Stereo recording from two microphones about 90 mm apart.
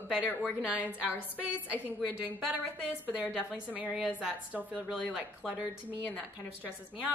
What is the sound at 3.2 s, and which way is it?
Speech, 15° right (ahead or behind).